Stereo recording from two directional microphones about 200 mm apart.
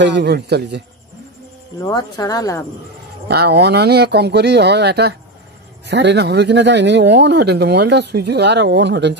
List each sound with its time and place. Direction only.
0.0 s speech: 60° right (ahead or behind)
1.8 s speech: 20° left (ahead or behind)
3.3 s speech: 55° right (ahead or behind)